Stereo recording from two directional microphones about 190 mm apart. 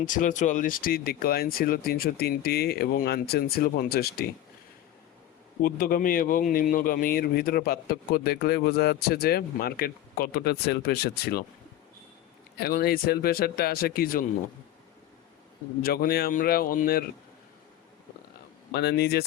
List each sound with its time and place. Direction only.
0.0 s speech: 45° left (ahead or behind)
5.6 s speech: 50° left (ahead or behind)
12.5 s speech: 55° left (ahead or behind)
15.8 s speech: 50° left (ahead or behind)
18.7 s speech: 60° left (ahead or behind)